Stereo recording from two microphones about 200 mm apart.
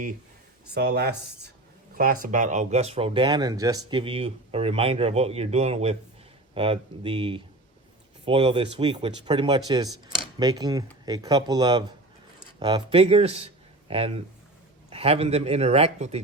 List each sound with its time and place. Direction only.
0.7 s speech: 55° right (ahead or behind)
2.3 s speech: 40° right (ahead or behind)